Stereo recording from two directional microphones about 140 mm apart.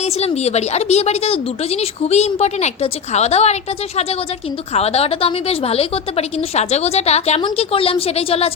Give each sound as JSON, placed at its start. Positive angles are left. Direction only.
{"t": 0.0, "sound": "a woman's voice", "side_deg": 50}